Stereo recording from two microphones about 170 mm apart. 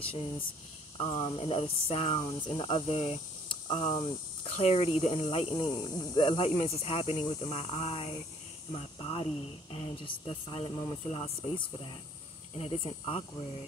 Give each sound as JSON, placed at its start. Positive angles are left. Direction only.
{"t": 0.9, "sound": "speech", "side_deg": 30}
{"t": 4.5, "sound": "speech", "side_deg": 40}
{"t": 5.1, "sound": "speech", "side_deg": 30}